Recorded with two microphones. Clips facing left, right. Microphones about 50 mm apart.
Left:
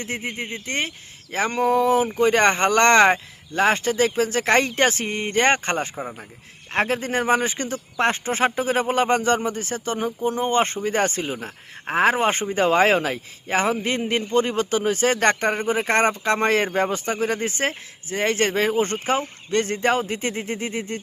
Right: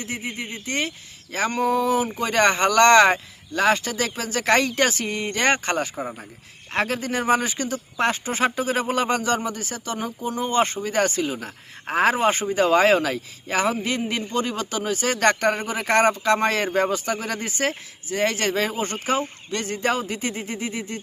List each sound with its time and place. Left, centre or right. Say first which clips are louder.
0.0 s speech: left 2 dB; left
11.3 s speech: left 1 dB; left